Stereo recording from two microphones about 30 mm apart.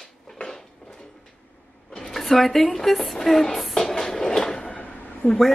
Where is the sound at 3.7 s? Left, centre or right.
Centre.